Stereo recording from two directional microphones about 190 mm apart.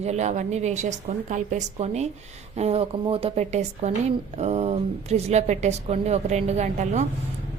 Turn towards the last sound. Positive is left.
turn(degrees=-35)  # may be behind; listen again after turning